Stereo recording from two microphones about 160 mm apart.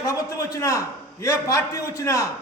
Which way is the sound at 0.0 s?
20° left (ahead or behind).